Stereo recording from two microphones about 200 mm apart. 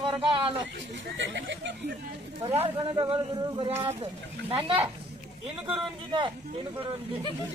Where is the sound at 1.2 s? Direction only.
65° right (ahead or behind).